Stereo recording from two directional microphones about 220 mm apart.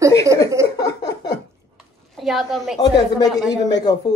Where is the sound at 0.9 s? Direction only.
50° left (ahead or behind).